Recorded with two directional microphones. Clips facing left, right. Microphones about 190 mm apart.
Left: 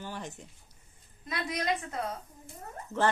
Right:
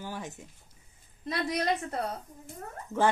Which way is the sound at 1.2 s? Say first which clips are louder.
Right 3 dB; 35° right (ahead or behind).